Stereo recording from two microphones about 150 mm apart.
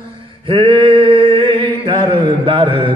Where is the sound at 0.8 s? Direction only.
35° right (ahead or behind).